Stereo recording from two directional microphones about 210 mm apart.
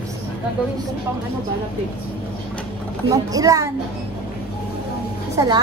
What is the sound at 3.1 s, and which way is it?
Speech, 15° right (ahead or behind).